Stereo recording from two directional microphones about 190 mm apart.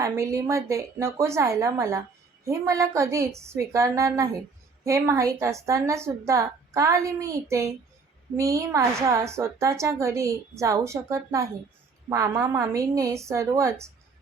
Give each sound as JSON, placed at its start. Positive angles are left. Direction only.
{"t": 0.0, "sound": "a woman's voice", "side_deg": -15}